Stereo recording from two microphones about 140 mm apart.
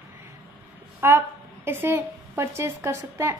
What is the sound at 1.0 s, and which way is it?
A woman's voice, 15° right (ahead or behind).